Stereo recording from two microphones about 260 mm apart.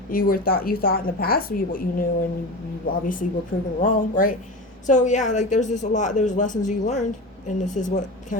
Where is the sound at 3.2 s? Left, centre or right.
Left.